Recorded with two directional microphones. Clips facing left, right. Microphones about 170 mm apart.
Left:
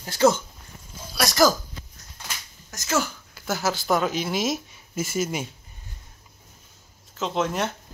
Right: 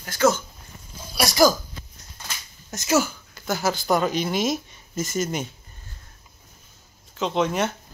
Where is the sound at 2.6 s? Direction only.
20° right (ahead or behind).